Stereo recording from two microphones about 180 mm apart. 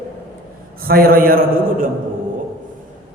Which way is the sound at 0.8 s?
55° right (ahead or behind).